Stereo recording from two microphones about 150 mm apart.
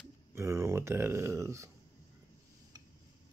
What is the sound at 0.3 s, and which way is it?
Speech, 15° right (ahead or behind).